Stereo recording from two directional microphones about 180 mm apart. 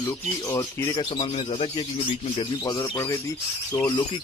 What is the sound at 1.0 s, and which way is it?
Speech, 25° left (ahead or behind).